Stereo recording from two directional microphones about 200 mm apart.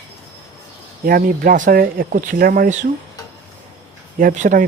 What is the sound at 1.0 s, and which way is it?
Speech, 45° right (ahead or behind).